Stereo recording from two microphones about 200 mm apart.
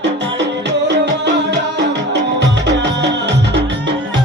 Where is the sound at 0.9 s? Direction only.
60° right (ahead or behind).